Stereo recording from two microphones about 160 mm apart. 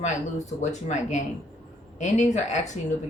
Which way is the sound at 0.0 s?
50° left (ahead or behind).